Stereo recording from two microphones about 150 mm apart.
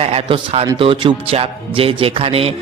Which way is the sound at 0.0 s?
40° right (ahead or behind).